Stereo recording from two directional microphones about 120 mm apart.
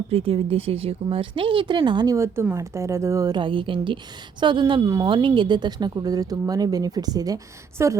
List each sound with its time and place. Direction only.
0.1 s speech: 50° right (ahead or behind)
2.1 s a woman's voice: 20° right (ahead or behind)